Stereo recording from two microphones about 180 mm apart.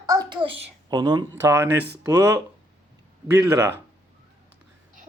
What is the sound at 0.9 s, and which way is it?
Speech, 25° right (ahead or behind).